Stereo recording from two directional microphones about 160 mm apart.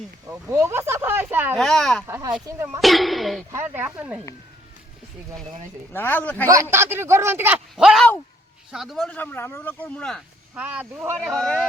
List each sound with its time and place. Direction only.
0.3 s a man's voice: 15° right (ahead or behind)
1.5 s speech: 5° left (ahead or behind)
2.0 s a man's voice: 15° right (ahead or behind)
2.8 s speech: centre (ahead or behind)
3.5 s a man's voice: 15° right (ahead or behind)
5.9 s speech: 15° left (ahead or behind)
6.5 s a man's voice: 15° right (ahead or behind); by 10.2 s 5° left (ahead or behind)
10.5 s a man's voice: 10° right (ahead or behind)
11.3 s speech: 5° left (ahead or behind)